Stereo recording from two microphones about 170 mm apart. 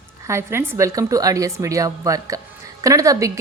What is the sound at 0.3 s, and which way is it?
A woman's voice, 15° right (ahead or behind).